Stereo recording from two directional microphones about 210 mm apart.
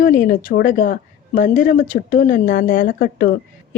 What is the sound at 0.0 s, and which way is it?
A woman's voice, 40° left (ahead or behind).